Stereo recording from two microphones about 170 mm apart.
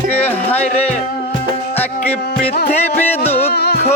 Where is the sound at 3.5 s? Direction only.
75° left (ahead or behind).